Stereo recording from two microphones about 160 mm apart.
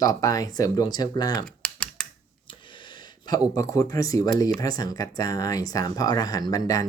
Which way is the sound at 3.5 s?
20° left (ahead or behind).